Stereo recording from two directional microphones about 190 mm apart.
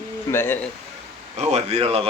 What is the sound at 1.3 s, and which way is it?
Speech, 35° right (ahead or behind).